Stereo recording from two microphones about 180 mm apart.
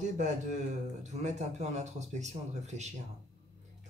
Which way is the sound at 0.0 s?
40° right (ahead or behind).